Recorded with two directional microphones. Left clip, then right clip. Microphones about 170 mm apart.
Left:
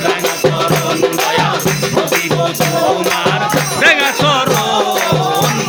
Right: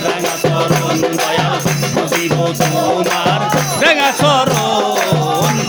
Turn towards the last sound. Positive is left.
turn(degrees=-30)  # may be behind; listen again after turning